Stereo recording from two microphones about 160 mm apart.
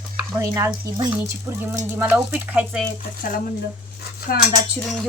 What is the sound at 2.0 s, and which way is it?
Speech, 10° right (ahead or behind).